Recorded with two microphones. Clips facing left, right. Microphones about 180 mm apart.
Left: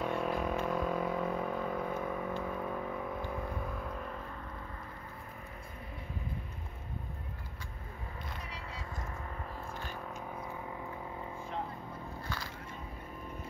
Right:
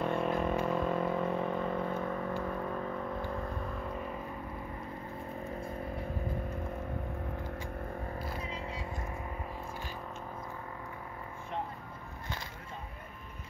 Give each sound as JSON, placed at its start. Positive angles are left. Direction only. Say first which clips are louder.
{"t": 0.0, "sound": "vehicle", "louder": "right 2 dB", "side_deg": 0}